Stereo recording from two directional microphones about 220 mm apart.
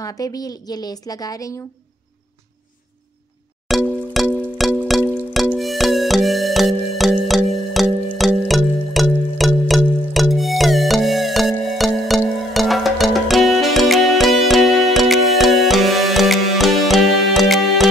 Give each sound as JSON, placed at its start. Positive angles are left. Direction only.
{"t": 0.0, "sound": "a woman's voice", "side_deg": 15}
{"t": 3.6, "sound": "music", "side_deg": 0}